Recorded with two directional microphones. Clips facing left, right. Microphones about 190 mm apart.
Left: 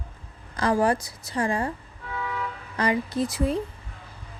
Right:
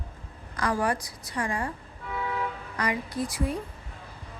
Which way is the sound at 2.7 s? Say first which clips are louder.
Left 5 dB; 25° left (ahead or behind).